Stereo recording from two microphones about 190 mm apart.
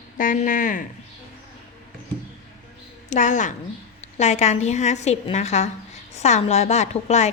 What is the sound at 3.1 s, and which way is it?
A woman's voice, 40° left (ahead or behind).